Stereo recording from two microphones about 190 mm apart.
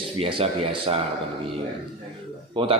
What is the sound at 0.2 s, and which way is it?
Speech, 30° right (ahead or behind).